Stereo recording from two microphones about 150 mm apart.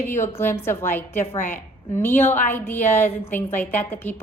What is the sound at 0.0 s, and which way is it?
A woman's voice, 15° left (ahead or behind).